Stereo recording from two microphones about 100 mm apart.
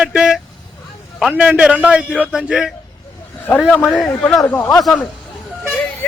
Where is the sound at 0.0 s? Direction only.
10° right (ahead or behind).